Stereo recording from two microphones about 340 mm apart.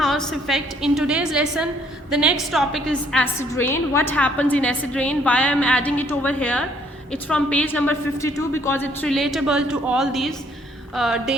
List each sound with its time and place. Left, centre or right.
0.0 s a woman's voice: centre